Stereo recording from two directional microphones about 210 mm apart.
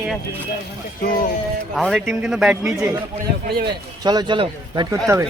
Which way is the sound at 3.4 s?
50° right (ahead or behind).